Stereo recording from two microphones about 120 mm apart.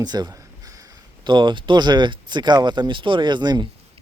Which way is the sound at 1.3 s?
40° right (ahead or behind).